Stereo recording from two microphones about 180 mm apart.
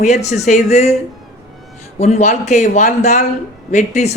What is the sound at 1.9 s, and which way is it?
A man's voice, 40° left (ahead or behind).